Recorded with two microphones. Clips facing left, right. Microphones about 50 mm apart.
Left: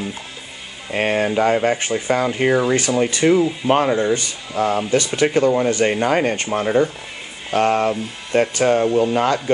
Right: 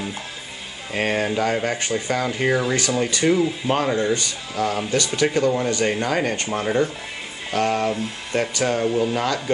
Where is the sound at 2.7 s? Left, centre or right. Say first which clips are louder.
Left 4 dB; left.